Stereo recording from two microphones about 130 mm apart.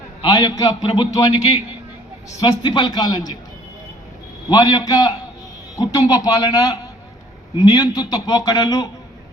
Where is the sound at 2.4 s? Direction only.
35° left (ahead or behind).